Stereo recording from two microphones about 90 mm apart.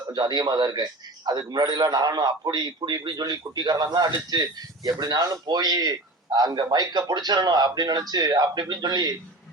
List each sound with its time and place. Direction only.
0.1 s a man's voice: 55° right (ahead or behind)